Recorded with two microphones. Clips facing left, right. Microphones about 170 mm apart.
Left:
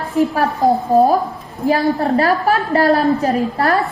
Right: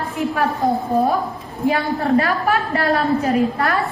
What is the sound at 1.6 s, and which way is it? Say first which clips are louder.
A woman's voice: left 3 dB; 35° left (ahead or behind).